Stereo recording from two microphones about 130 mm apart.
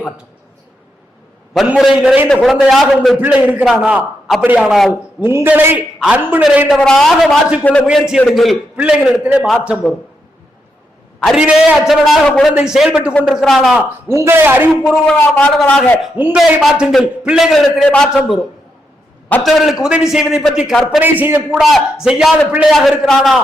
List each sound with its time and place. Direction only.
1.5 s a man's voice: 5° right (ahead or behind)
2.2 s a man's voice: 5° left (ahead or behind)
3.2 s a man's voice: 10° right (ahead or behind)
5.2 s a man's voice: 15° right (ahead or behind)
6.7 s a man's voice: 5° left (ahead or behind)
7.9 s a man's voice: 5° right (ahead or behind)
11.3 s a man's voice: 5° right (ahead or behind)
14.1 s a man's voice: 20° right (ahead or behind)
14.8 s a man's voice: 5° left (ahead or behind)
16.1 s a man's voice: 15° right (ahead or behind)
21.0 s a man's voice: 15° right (ahead or behind)
22.0 s a man's voice: 5° right (ahead or behind)